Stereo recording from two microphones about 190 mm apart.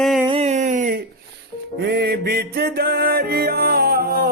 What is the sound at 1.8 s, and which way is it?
Music, 60° right (ahead or behind).